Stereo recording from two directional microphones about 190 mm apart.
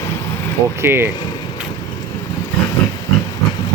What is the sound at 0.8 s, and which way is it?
Speech, 10° right (ahead or behind).